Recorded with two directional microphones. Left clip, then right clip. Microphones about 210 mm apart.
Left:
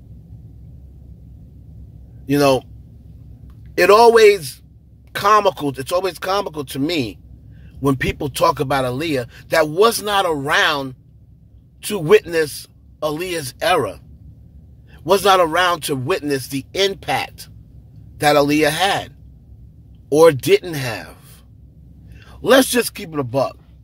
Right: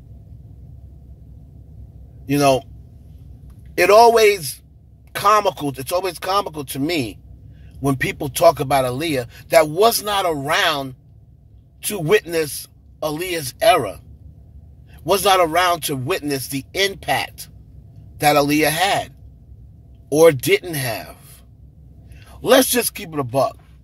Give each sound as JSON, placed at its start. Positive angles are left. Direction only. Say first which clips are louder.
{"t": 2.2, "sound": "a man's voice", "louder": "left 1 dB", "side_deg": 20}
{"t": 3.7, "sound": "a man's voice", "louder": "left 1 dB", "side_deg": 15}
{"t": 15.0, "sound": "speech", "louder": "left 2 dB", "side_deg": 15}
{"t": 22.2, "sound": "a man's voice", "louder": "left 1 dB", "side_deg": 15}